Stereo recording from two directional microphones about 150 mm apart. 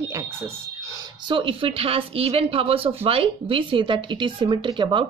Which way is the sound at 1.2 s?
35° right (ahead or behind).